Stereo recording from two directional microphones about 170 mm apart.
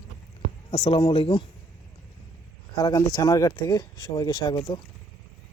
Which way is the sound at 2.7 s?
20° left (ahead or behind).